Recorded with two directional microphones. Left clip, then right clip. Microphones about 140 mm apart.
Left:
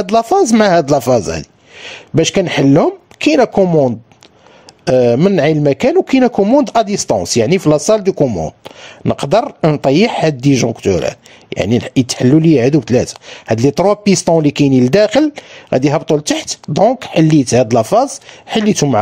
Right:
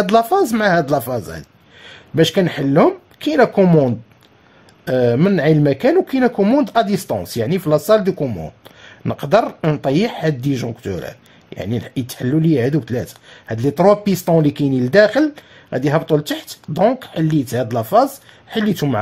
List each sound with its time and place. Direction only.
0.0 s speech: 40° left (ahead or behind)
3.6 s speech: 25° left (ahead or behind)
4.8 s speech: 40° left (ahead or behind)
8.2 s speech: 25° left (ahead or behind)
8.5 s speech: 40° left (ahead or behind)